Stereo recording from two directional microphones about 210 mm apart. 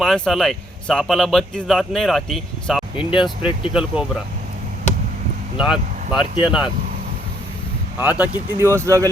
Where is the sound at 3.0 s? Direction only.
25° left (ahead or behind).